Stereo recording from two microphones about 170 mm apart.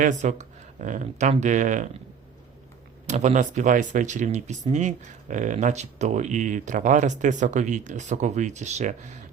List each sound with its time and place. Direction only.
0.0 s speech: 45° right (ahead or behind)
3.1 s speech: 45° right (ahead or behind)